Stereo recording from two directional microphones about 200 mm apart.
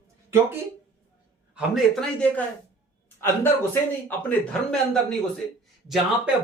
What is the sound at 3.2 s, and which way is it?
Speech, 10° left (ahead or behind).